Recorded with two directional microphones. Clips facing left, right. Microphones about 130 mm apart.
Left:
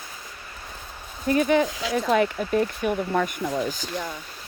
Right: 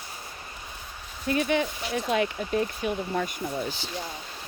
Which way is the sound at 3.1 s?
70° left (ahead or behind).